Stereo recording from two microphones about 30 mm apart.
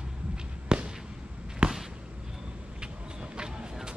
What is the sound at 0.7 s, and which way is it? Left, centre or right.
Fireworks, right.